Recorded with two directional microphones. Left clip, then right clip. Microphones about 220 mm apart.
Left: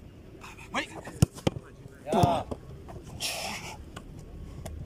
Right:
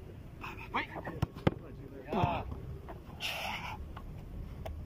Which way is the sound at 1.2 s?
55° left (ahead or behind).